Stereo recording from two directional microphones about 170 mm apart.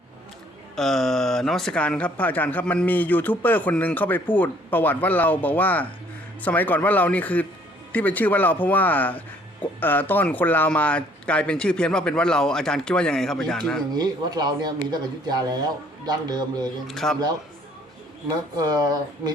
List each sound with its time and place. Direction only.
0.8 s speech: centre (ahead or behind)
13.9 s a man's voice: 25° right (ahead or behind)
16.8 s speech: centre (ahead or behind)
18.5 s a man's voice: 25° right (ahead or behind)